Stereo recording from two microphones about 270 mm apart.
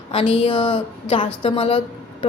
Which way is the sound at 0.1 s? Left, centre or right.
Left.